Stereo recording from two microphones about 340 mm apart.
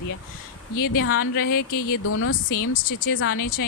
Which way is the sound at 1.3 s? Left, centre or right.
Left.